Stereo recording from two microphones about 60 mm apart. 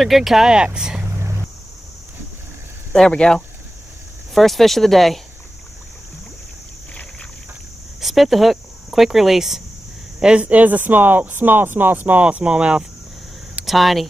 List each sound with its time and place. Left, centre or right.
0.0 s speech: centre
2.9 s speech: centre
4.3 s speech: centre
6.9 s boat: centre
8.0 s speech: centre
10.2 s speech: centre
13.7 s speech: centre